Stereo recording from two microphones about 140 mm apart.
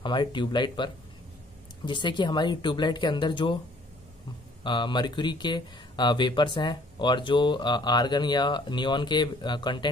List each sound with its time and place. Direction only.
0.0 s speech: 35° left (ahead or behind)
4.6 s speech: 35° left (ahead or behind)